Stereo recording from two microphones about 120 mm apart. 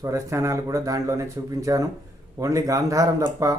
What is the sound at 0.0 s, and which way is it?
Speech, 25° right (ahead or behind).